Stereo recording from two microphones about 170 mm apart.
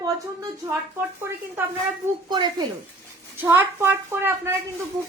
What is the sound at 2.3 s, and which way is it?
Speech, 25° right (ahead or behind).